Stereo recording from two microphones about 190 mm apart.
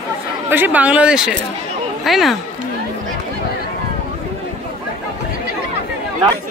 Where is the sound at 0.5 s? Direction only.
10° right (ahead or behind).